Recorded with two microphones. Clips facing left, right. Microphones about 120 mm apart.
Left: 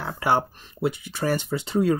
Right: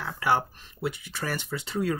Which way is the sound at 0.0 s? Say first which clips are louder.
Left 3 dB; 30° left (ahead or behind).